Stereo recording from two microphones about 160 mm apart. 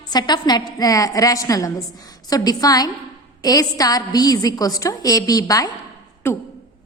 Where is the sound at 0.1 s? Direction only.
25° left (ahead or behind).